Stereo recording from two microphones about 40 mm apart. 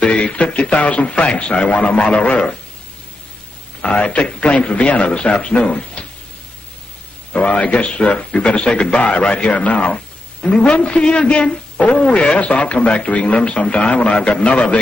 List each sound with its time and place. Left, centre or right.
0.0 s a man's voice: left
3.8 s a man's voice: left
7.3 s a man's voice: left